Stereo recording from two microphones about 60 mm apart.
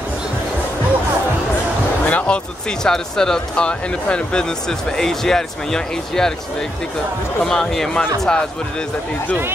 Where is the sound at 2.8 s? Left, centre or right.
Centre.